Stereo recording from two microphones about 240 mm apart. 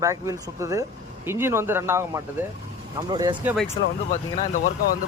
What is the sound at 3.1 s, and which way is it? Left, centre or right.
Speech, centre.